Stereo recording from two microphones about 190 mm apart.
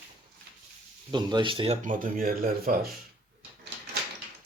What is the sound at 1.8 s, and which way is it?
Speech, 45° right (ahead or behind).